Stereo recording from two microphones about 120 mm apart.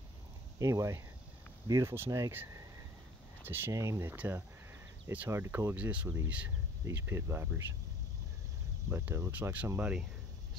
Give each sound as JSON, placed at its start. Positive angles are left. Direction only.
{"t": 0.6, "sound": "speech", "side_deg": -25}
{"t": 3.4, "sound": "speech", "side_deg": -20}
{"t": 6.0, "sound": "speech", "side_deg": -20}
{"t": 8.9, "sound": "speech", "side_deg": -20}